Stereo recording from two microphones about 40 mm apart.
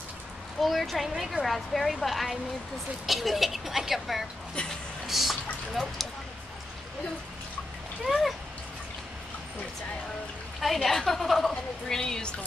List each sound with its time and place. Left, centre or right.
0.6 s a woman's voice: centre
1.3 s a woman's voice: centre
5.0 s a sound: centre
8.0 s speech: centre
10.6 s a woman's voice: centre
11.9 s speech: centre